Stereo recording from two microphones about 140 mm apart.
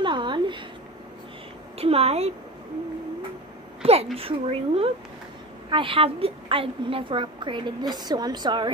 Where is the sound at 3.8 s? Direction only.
45° right (ahead or behind).